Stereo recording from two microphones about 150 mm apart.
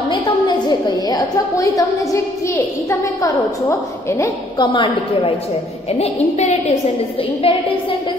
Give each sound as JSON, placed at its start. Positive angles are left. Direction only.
{"t": 0.7, "sound": "a woman's voice", "side_deg": 25}
{"t": 4.7, "sound": "a woman's voice", "side_deg": 35}